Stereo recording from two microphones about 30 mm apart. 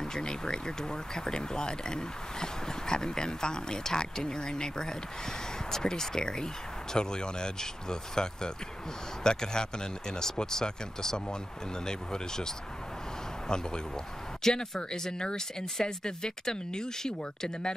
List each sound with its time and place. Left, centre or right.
0.0 s speech: left
14.4 s speech: centre